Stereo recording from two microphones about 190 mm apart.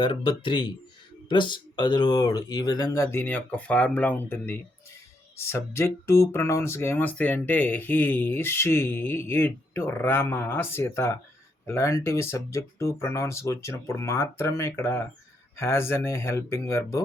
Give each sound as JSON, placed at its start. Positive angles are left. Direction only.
{"t": 0.0, "sound": "speech", "side_deg": 25}